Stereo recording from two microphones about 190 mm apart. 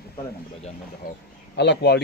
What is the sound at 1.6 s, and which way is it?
Speech, 60° left (ahead or behind).